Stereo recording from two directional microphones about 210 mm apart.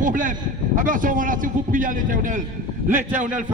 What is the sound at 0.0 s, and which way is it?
A man's voice, 40° right (ahead or behind).